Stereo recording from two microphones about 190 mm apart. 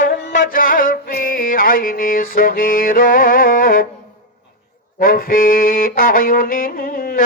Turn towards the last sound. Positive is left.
turn(degrees=50)  # may be behind; listen again after turning